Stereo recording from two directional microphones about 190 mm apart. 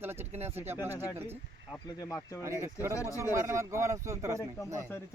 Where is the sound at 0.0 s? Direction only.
10° right (ahead or behind).